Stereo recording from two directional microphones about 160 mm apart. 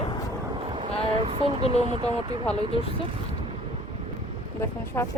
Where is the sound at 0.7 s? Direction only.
35° right (ahead or behind).